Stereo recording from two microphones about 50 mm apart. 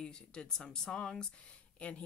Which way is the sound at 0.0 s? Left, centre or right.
Centre.